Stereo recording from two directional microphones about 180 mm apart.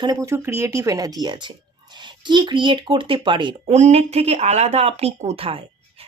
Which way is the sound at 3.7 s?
35° right (ahead or behind).